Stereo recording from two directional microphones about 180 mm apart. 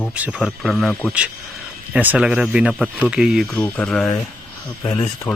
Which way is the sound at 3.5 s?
10° left (ahead or behind).